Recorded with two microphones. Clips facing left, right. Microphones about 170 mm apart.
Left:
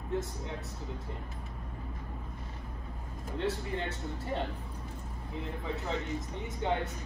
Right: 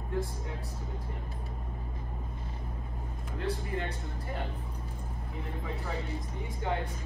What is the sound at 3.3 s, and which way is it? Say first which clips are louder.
Speech: left 1 dB; 30° left (ahead or behind).